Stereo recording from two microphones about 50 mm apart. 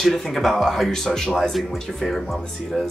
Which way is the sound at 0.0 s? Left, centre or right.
Centre.